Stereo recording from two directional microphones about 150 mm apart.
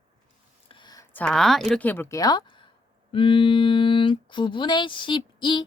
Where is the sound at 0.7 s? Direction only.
30° left (ahead or behind).